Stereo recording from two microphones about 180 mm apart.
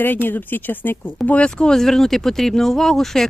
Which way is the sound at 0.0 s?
10° left (ahead or behind).